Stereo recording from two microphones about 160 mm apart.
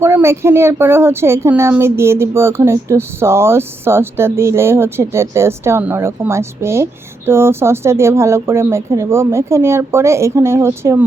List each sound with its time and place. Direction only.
0.0 s speech: 15° right (ahead or behind)